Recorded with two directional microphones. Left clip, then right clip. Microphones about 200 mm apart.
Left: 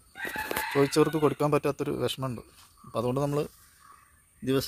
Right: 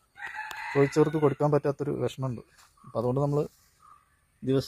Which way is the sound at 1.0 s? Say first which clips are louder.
Left 1 dB; 15° left (ahead or behind).